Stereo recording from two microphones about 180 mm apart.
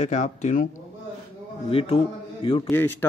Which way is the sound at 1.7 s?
30° left (ahead or behind).